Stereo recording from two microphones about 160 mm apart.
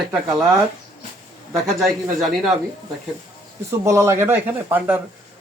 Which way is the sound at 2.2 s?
Centre (ahead or behind).